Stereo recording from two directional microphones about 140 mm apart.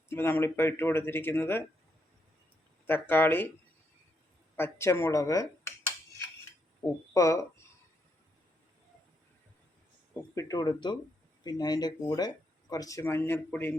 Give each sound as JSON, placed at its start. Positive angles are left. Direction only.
{"t": 0.1, "sound": "speech", "side_deg": 15}
{"t": 2.8, "sound": "speech", "side_deg": 15}
{"t": 4.5, "sound": "speech", "side_deg": 15}
{"t": 6.8, "sound": "speech", "side_deg": 20}
{"t": 10.3, "sound": "speech", "side_deg": 25}